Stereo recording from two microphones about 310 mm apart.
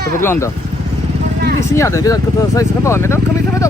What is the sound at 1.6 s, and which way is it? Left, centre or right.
Speech, centre.